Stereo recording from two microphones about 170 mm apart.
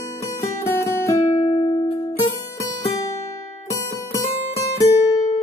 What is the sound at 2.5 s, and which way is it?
Music, 20° left (ahead or behind).